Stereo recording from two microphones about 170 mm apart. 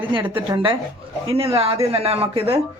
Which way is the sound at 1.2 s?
35° right (ahead or behind).